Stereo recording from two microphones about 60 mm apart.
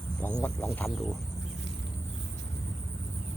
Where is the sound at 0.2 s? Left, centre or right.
Left.